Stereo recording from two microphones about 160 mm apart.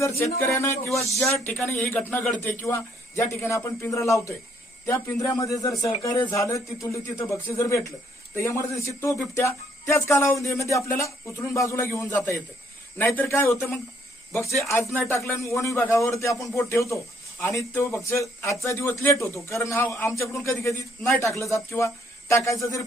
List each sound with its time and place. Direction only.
0.2 s a man's voice: 15° left (ahead or behind)